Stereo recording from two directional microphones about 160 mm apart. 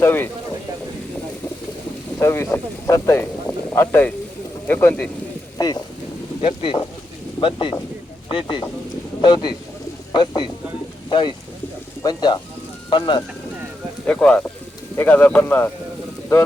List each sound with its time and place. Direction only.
0.0 s speech: 15° left (ahead or behind)
2.1 s speech: 15° left (ahead or behind)
5.6 s speech: 20° left (ahead or behind)
6.4 s speech: 35° left (ahead or behind)
14.1 s speech: 5° left (ahead or behind)